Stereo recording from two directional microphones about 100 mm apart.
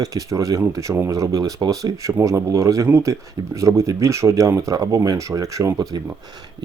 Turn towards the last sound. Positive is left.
turn(degrees=-40)  # may be behind; listen again after turning